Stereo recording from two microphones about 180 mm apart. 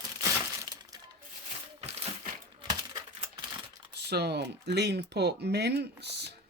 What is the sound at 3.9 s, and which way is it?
Speech, 65° right (ahead or behind).